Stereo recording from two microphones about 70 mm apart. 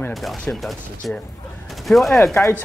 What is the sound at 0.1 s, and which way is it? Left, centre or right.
Fusillade, centre.